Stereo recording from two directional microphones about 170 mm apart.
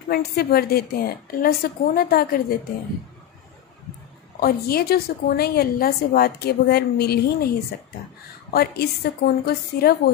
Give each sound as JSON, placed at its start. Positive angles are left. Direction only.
{"t": 0.1, "sound": "a woman's voice", "side_deg": 65}
{"t": 4.4, "sound": "a woman's voice", "side_deg": 60}
{"t": 8.5, "sound": "a woman's voice", "side_deg": 65}